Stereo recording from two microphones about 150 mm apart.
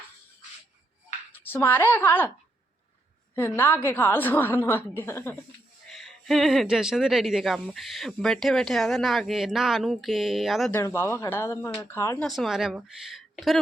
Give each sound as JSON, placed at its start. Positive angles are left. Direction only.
{"t": 1.3, "sound": "speech", "side_deg": 15}
{"t": 3.3, "sound": "a woman's voice", "side_deg": 15}
{"t": 5.9, "sound": "speech", "side_deg": 0}
{"t": 10.7, "sound": "a woman's voice", "side_deg": 15}
{"t": 12.2, "sound": "speech", "side_deg": 0}